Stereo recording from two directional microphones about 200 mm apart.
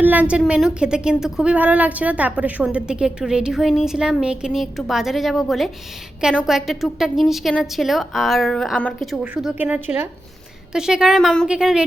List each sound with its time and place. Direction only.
0.0 s a woman's voice: 10° right (ahead or behind)